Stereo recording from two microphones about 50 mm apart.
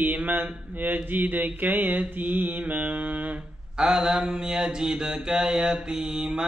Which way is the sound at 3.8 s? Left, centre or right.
Centre.